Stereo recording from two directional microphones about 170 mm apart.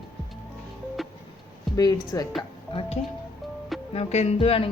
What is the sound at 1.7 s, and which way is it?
Speech, 20° left (ahead or behind).